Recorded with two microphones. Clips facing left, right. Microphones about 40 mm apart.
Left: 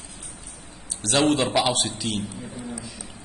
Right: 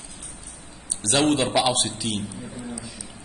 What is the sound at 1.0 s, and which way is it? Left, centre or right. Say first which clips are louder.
A man's voice: even; centre.